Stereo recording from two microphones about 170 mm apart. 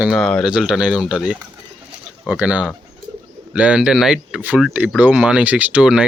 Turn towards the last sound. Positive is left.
turn(degrees=-5)  # may be behind; listen again after turning